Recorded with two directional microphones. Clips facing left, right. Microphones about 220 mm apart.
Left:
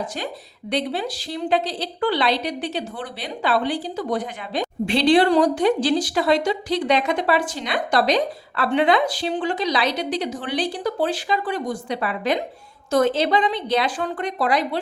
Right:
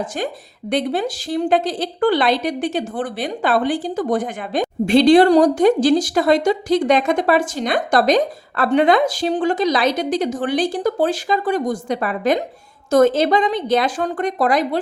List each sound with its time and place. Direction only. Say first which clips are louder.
0.7 s a woman's voice: right 4 dB; 45° right (ahead or behind)